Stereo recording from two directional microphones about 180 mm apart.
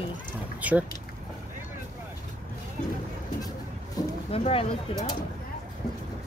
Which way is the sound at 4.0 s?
20° left (ahead or behind).